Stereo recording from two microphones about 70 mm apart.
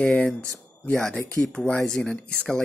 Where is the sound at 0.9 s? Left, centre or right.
Centre.